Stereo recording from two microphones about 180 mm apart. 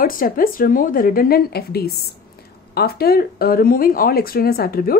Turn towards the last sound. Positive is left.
turn(degrees=55)  # may be behind; listen again after turning